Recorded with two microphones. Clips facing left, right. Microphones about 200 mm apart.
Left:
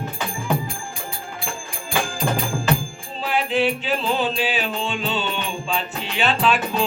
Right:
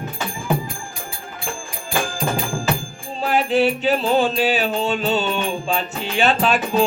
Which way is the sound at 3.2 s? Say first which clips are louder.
Right 3 dB; 45° right (ahead or behind).